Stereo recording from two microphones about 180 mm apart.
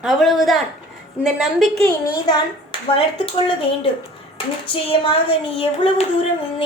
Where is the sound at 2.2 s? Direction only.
25° left (ahead or behind).